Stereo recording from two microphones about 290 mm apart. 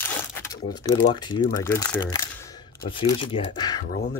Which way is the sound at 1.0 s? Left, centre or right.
Centre.